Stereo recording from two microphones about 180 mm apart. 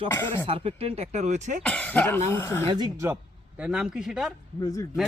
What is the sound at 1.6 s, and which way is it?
Speech, 10° left (ahead or behind).